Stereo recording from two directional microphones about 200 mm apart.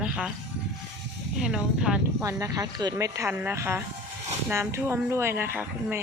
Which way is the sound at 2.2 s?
15° right (ahead or behind).